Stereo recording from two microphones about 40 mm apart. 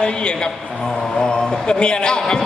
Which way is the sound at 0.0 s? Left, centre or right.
Left.